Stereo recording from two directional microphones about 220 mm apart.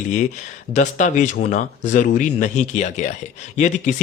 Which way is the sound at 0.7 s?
35° left (ahead or behind).